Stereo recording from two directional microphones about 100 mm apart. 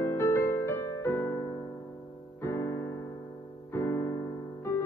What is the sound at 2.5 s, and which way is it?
Piano, 30° left (ahead or behind).